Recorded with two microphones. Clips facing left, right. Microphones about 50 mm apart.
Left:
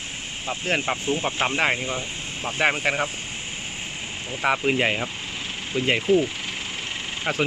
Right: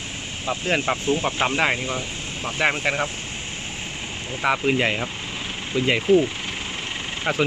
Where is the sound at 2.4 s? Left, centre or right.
Centre.